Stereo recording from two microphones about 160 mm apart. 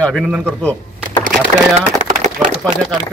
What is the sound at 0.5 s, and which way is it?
Speech, 5° left (ahead or behind).